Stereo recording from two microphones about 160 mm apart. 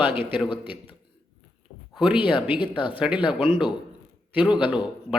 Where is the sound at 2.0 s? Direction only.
30° left (ahead or behind).